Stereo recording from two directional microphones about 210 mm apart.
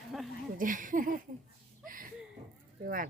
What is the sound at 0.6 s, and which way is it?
Speech, 40° right (ahead or behind).